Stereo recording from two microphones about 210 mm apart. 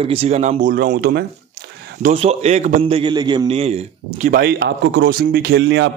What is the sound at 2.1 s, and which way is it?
A man's voice, 30° right (ahead or behind).